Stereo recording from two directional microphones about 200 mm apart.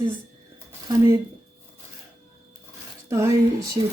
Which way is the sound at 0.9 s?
15° right (ahead or behind).